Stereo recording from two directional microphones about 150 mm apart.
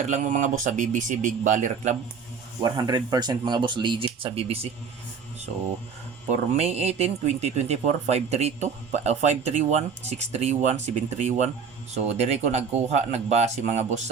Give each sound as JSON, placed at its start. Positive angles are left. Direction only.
{"t": 0.0, "sound": "speech", "side_deg": -55}
{"t": 2.6, "sound": "speech", "side_deg": -25}
{"t": 6.6, "sound": "speech", "side_deg": -45}